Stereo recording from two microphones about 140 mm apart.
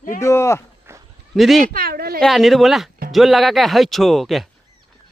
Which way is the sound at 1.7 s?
90° right.